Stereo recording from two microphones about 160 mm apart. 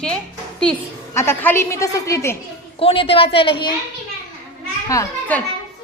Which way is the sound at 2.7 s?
35° left (ahead or behind).